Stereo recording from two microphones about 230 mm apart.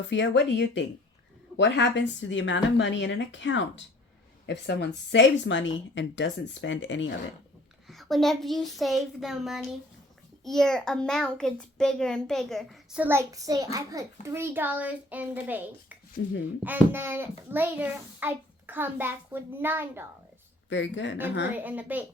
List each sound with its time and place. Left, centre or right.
0.1 s a woman's voice: left
7.9 s a child's voice: centre
20.7 s a woman's voice: left
21.5 s a child's voice: centre